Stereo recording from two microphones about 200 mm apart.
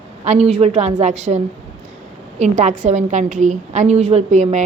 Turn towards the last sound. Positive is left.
turn(degrees=-35)  # may be behind; listen again after turning